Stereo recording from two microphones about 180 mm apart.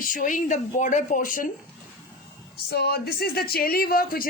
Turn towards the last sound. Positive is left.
turn(degrees=55)  # may be behind; listen again after turning